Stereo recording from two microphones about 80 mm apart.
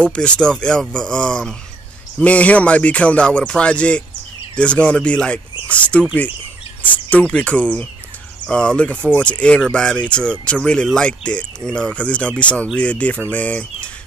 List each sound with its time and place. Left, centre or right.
0.0 s speech: centre